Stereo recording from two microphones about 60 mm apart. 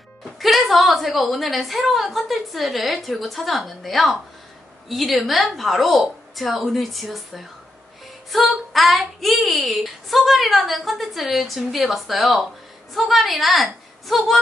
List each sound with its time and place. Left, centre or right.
0.4 s a woman's voice: centre